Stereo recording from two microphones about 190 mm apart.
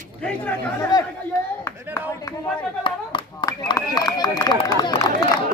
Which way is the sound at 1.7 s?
15° left (ahead or behind).